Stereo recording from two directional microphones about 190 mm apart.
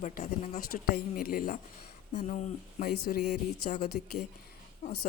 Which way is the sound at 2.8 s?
55° left (ahead or behind).